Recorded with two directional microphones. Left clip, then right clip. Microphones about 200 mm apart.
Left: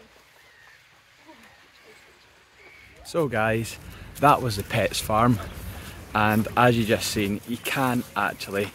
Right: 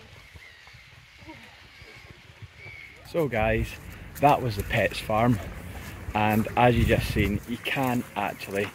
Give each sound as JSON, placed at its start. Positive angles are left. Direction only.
{"t": 3.1, "sound": "speech", "side_deg": 25}